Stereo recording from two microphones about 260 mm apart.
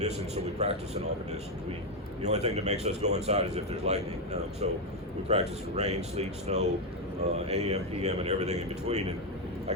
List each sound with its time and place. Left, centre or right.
0.0 s a man's voice: right
2.2 s a man's voice: right